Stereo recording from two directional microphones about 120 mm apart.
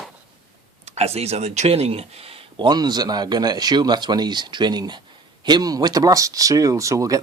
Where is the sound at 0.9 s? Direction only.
60° right (ahead or behind).